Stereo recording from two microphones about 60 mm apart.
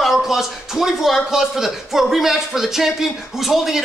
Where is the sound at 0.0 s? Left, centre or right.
Centre.